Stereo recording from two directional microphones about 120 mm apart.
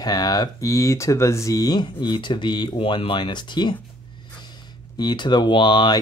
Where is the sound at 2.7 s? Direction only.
50° left (ahead or behind).